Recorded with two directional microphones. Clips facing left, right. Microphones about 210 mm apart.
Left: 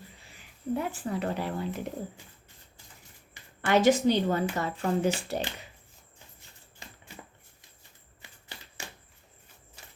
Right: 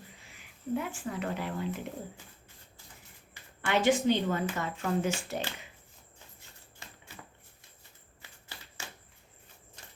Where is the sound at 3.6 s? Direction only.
40° left (ahead or behind).